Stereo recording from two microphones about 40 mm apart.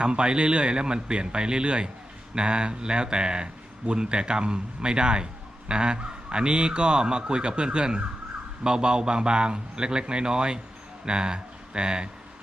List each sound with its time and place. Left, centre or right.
0.0 s speech: right